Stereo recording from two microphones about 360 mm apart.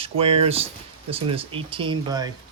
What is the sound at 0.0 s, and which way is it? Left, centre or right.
Speech, centre.